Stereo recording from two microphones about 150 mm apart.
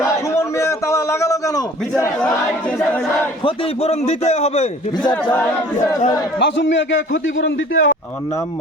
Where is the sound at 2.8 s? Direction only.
10° left (ahead or behind).